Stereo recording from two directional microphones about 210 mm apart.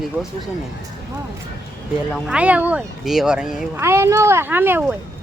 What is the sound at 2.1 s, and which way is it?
Speech, 5° right (ahead or behind).